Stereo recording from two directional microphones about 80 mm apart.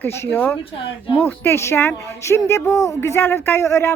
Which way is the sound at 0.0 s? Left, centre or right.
Left.